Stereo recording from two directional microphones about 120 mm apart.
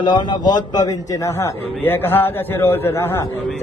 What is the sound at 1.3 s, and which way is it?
A man's voice, 20° left (ahead or behind).